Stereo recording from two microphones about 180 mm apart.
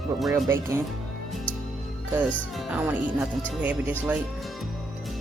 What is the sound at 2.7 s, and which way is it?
Speech, 5° right (ahead or behind).